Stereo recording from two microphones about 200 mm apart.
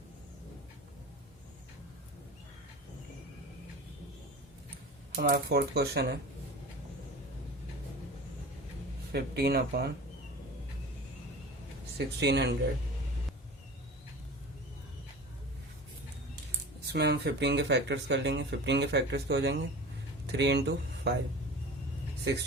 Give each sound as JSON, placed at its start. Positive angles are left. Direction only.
{"t": 5.1, "sound": "speech", "side_deg": -50}
{"t": 9.1, "sound": "speech", "side_deg": -50}
{"t": 11.9, "sound": "speech", "side_deg": -55}
{"t": 16.9, "sound": "speech", "side_deg": -55}
{"t": 22.2, "sound": "speech", "side_deg": -55}